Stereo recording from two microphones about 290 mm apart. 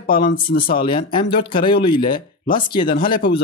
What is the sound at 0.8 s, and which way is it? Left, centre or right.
Speech, centre.